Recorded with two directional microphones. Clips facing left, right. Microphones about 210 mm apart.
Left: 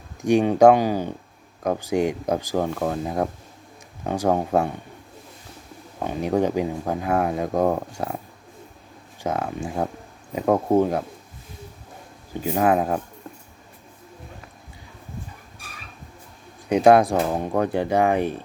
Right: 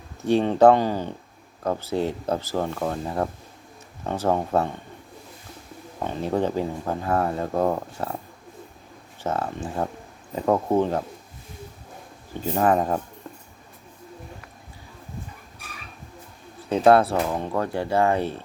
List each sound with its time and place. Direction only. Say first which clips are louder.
0.2 s speech: left 2 dB; 15° left (ahead or behind)
6.1 s speech: left 3 dB; 10° left (ahead or behind)
9.2 s speech: left 1 dB; 10° left (ahead or behind)
12.3 s speech: left 1 dB; 10° left (ahead or behind)
16.6 s speech: left 2 dB; 15° left (ahead or behind)
17.2 s speech: left 3 dB; 25° left (ahead or behind)